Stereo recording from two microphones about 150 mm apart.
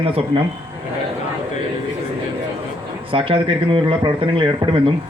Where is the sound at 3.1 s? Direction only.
35° right (ahead or behind).